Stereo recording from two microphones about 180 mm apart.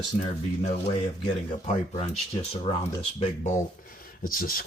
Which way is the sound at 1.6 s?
40° left (ahead or behind).